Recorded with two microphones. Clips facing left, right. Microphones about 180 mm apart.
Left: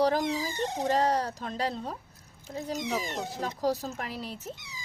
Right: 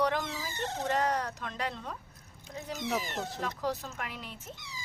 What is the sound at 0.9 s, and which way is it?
Speech, 30° left (ahead or behind).